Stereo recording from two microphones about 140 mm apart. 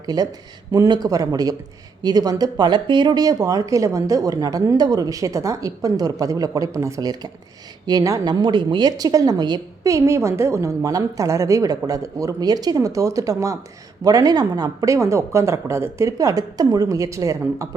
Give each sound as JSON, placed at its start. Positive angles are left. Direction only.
{"t": 0.0, "sound": "a woman's voice", "side_deg": -25}